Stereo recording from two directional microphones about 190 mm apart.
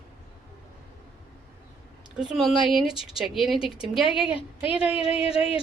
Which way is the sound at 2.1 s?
Centre (ahead or behind).